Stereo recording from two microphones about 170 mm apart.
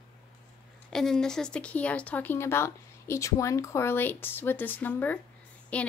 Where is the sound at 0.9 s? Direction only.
Centre (ahead or behind).